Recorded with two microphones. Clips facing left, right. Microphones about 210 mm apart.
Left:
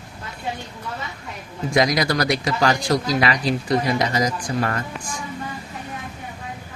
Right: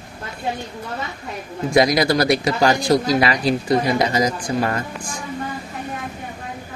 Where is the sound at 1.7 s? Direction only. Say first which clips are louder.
Right 4 dB; 30° right (ahead or behind).